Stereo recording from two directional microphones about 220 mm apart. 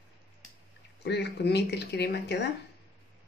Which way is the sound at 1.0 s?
50° left (ahead or behind).